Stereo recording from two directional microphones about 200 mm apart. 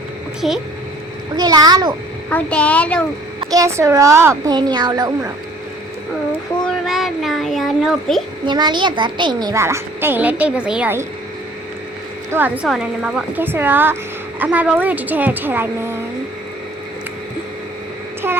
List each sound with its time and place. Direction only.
0.4 s speech: centre (ahead or behind)
1.4 s a child's voice: 20° right (ahead or behind)
2.3 s speech: 5° left (ahead or behind)
3.4 s a woman's voice: 15° right (ahead or behind)
6.7 s speech: centre (ahead or behind)
8.4 s a woman's voice: 20° right (ahead or behind)
12.6 s a woman's voice: 5° right (ahead or behind)
18.2 s a sound: 10° right (ahead or behind)